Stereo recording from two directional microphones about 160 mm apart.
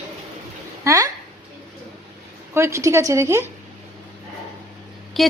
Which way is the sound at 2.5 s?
15° right (ahead or behind).